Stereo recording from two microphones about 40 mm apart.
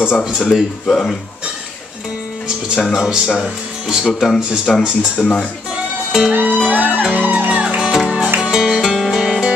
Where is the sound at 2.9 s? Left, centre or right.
Centre.